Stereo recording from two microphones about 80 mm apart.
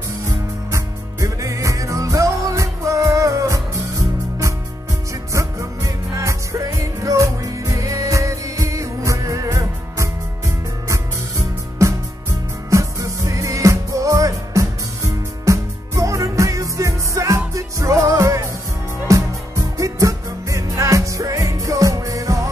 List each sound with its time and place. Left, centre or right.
0.7 s music: right
11.8 s music: right